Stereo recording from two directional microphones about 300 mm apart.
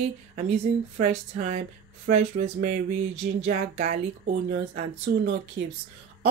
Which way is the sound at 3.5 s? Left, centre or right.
Right.